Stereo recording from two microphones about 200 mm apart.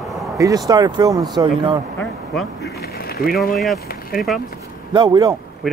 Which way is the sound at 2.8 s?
50° left (ahead or behind).